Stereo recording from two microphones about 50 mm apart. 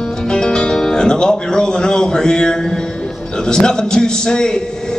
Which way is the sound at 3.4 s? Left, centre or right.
Centre.